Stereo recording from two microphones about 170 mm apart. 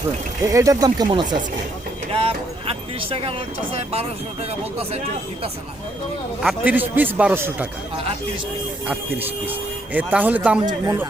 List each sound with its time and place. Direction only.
0.5 s speech: 20° right (ahead or behind)
2.2 s a sound: 35° right (ahead or behind)
6.4 s speech: 5° right (ahead or behind)
8.9 s speech: 10° right (ahead or behind)
10.7 s speech: 20° right (ahead or behind)